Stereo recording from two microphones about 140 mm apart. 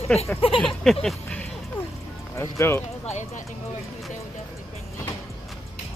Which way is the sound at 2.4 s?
20° left (ahead or behind).